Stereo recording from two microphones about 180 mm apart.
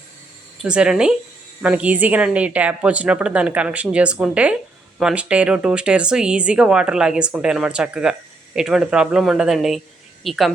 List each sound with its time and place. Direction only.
0.6 s a woman's voice: 5° right (ahead or behind)